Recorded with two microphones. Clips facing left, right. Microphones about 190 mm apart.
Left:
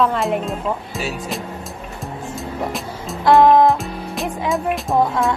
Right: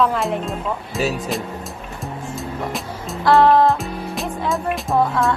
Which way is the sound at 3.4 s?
15° left (ahead or behind).